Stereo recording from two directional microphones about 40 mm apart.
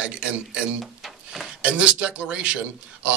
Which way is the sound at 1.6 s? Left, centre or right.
Right.